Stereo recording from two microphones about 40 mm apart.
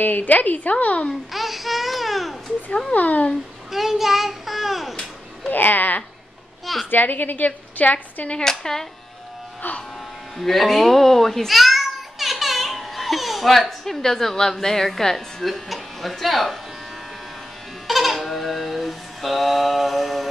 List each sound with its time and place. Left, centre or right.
0.0 s a woman's voice: left
1.3 s babbling: centre
2.9 s a woman's voice: left
3.7 s a child's voice: centre
5.5 s a woman's voice: left
6.6 s a child's voice: centre
6.9 s a woman's voice: left
8.5 s speech: centre
10.3 s a child's voice: centre
17.8 s goat: centre